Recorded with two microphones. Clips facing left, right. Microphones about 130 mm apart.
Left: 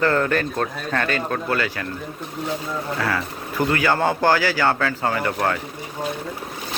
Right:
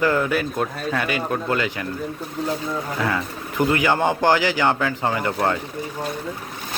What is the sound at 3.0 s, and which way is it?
Speech, 20° right (ahead or behind).